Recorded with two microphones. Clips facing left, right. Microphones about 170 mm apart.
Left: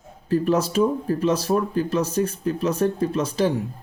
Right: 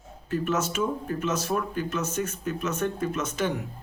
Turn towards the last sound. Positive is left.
turn(degrees=30)  # may be behind; listen again after turning